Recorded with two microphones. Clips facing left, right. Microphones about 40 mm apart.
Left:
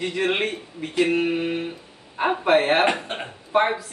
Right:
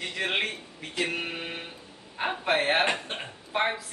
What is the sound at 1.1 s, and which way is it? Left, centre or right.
Male singing, centre.